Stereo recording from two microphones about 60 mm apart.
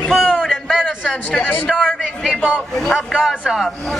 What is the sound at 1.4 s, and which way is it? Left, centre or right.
Speech, left.